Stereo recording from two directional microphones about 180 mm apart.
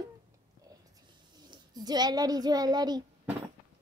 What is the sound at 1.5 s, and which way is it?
A child's voice, 20° right (ahead or behind).